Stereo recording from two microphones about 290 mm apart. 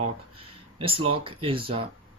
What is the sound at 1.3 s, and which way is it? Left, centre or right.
Speech, centre.